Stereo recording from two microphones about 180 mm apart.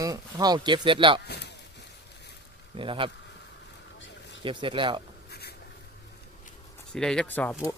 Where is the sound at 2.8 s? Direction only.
30° right (ahead or behind).